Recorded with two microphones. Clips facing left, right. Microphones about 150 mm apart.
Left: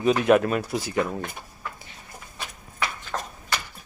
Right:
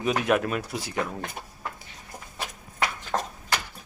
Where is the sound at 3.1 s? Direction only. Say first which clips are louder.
Right 5 dB; 25° right (ahead or behind).